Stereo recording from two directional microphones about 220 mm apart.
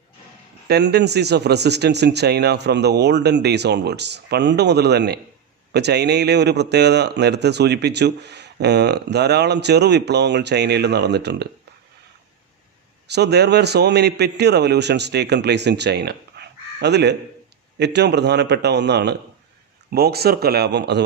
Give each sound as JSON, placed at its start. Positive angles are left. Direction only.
{"t": 0.7, "sound": "a man's voice", "side_deg": -50}
{"t": 13.1, "sound": "a man's voice", "side_deg": -50}